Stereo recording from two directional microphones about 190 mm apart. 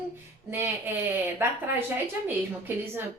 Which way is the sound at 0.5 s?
10° right (ahead or behind).